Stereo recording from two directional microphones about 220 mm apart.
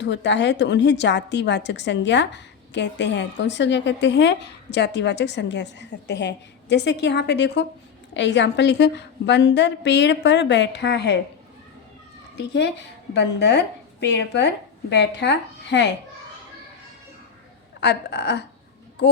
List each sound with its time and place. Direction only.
0.0 s a woman's voice: 55° left (ahead or behind)
13.1 s a woman's voice: 50° left (ahead or behind)
17.7 s a woman's voice: 50° left (ahead or behind)